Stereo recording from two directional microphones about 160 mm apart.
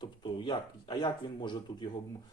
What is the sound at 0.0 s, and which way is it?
Speech, 30° left (ahead or behind).